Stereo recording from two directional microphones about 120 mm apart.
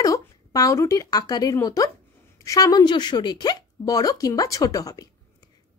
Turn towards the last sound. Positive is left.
turn(degrees=30)  # may be behind; listen again after turning